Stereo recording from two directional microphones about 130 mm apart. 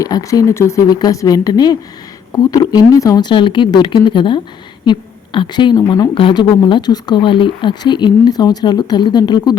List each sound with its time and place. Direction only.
0.0 s speech: 25° left (ahead or behind)